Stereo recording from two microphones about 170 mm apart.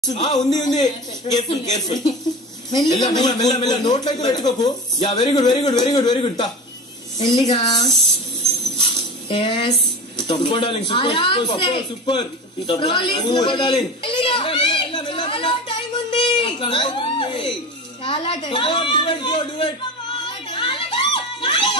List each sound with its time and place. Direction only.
0.2 s speech: 20° left (ahead or behind)
2.2 s speech: centre (ahead or behind)
3.1 s speech: 20° left (ahead or behind)
8.7 s a sound: 35° left (ahead or behind)
18.0 s a woman's voice: 30° left (ahead or behind)
20.2 s a sound: 30° left (ahead or behind)